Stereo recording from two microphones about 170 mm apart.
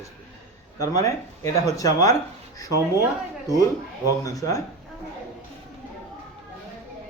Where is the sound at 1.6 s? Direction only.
20° left (ahead or behind).